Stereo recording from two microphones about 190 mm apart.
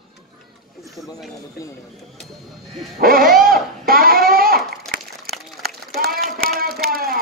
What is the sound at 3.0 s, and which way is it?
Owl, 50° right (ahead or behind).